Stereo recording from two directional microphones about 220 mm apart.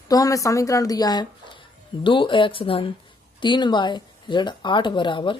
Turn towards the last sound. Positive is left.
turn(degrees=20)  # may be behind; listen again after turning